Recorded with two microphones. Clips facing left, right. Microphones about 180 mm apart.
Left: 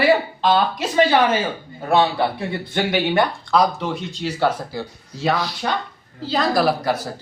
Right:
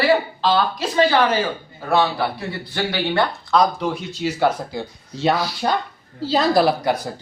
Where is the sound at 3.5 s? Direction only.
5° left (ahead or behind).